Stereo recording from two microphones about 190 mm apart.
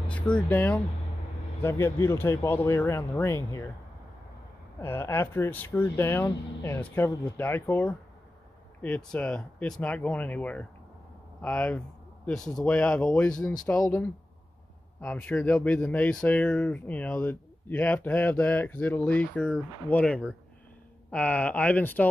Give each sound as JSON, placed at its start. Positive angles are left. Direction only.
{"t": 0.1, "sound": "speech", "side_deg": 10}
{"t": 4.7, "sound": "speech", "side_deg": 15}
{"t": 13.7, "sound": "speech", "side_deg": 15}
{"t": 15.0, "sound": "speech", "side_deg": 5}